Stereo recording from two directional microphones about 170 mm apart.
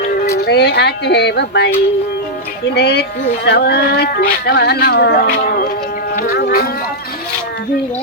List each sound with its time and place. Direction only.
0.2 s speech: 70° left (ahead or behind)
2.7 s speech: 75° left (ahead or behind)
6.1 s a sound: 60° left (ahead or behind)